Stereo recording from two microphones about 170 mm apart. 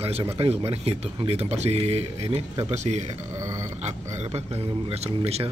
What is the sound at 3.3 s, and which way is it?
Grunt, 20° right (ahead or behind).